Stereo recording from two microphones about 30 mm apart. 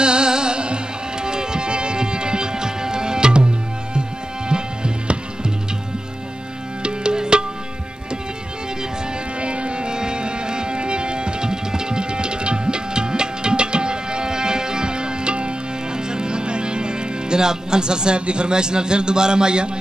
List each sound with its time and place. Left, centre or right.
0.0 s music: right
4.5 s music: right
6.8 s music: right
9.4 s music: right